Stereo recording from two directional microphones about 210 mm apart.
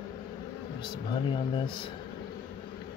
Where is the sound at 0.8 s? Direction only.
20° left (ahead or behind).